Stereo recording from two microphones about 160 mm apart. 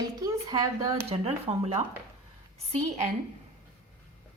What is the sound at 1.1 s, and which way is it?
A woman's voice, 40° right (ahead or behind).